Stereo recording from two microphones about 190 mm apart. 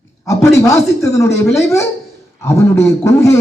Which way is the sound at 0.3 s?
15° left (ahead or behind).